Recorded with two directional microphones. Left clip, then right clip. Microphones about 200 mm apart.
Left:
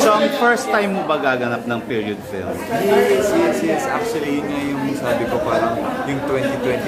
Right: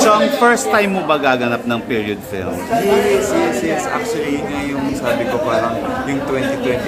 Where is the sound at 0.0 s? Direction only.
20° right (ahead or behind).